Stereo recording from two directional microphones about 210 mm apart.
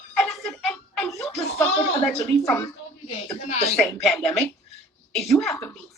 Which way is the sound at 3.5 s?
30° left (ahead or behind).